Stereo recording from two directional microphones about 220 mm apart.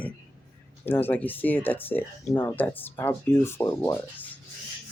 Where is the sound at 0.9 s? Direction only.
10° left (ahead or behind).